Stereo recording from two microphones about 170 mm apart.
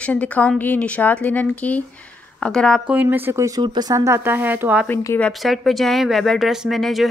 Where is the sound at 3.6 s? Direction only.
25° right (ahead or behind); by 4.9 s 10° right (ahead or behind).